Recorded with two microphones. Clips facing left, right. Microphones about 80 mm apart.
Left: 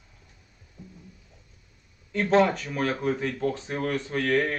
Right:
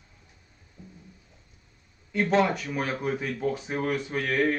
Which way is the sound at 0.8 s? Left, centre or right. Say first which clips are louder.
Left 2 dB; right.